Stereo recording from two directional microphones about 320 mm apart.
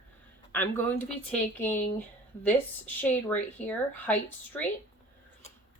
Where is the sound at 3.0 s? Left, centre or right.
Centre.